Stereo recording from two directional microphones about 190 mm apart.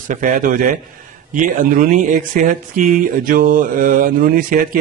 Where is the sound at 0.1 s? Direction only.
45° right (ahead or behind).